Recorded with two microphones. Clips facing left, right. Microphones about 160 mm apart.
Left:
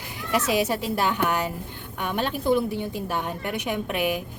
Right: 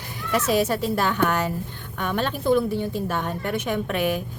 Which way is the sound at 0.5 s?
15° left (ahead or behind).